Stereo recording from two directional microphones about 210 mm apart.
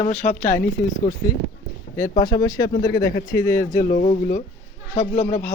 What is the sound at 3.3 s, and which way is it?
Speech, 15° left (ahead or behind).